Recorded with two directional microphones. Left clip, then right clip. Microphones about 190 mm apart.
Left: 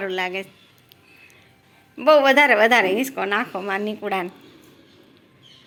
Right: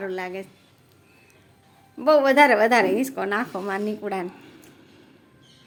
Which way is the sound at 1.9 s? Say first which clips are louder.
Left 2 dB; 10° right (ahead or behind).